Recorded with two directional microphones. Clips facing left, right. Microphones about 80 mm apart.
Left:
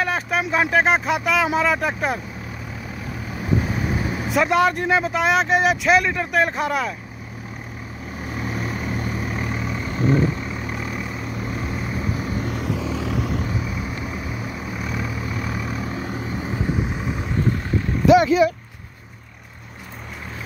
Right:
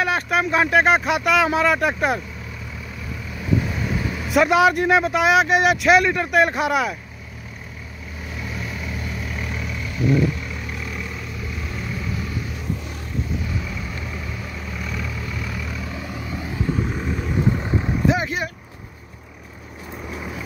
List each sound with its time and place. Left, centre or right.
0.0 s speech: centre
3.3 s vehicle: left
4.3 s speech: centre
8.2 s vehicle: left
11.7 s vehicle: left
12.6 s vehicle: left
13.5 s vehicle: left
16.8 s vehicle: centre
18.0 s vehicle: left